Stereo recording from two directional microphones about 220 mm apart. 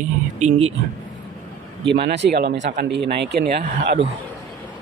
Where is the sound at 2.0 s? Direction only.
50° right (ahead or behind).